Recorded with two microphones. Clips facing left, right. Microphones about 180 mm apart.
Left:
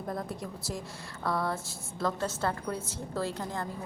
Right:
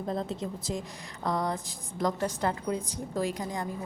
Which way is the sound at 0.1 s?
20° right (ahead or behind).